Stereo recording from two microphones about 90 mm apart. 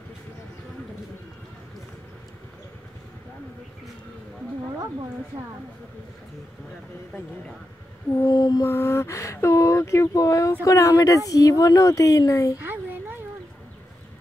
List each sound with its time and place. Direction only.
8.3 s mantra: 45° left (ahead or behind)
8.6 s speech: 30° left (ahead or behind)